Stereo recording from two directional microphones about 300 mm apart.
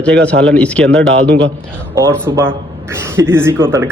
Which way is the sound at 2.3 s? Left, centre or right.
Centre.